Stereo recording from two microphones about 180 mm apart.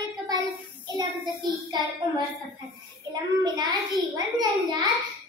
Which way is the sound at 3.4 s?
20° right (ahead or behind).